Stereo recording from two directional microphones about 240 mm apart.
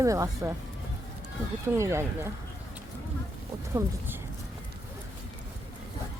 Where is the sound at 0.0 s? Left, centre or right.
Centre.